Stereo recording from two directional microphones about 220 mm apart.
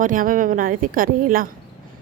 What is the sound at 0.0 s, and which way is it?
Speech, 40° right (ahead or behind).